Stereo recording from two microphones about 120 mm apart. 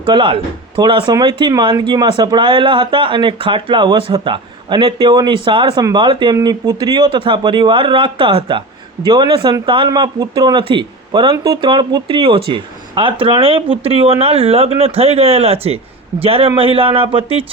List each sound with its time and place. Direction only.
0.0 s speech: 45° right (ahead or behind)